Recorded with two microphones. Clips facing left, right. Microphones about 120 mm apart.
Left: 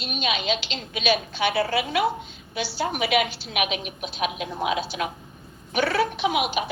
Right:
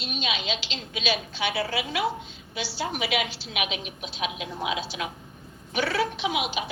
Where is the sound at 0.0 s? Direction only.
55° left (ahead or behind).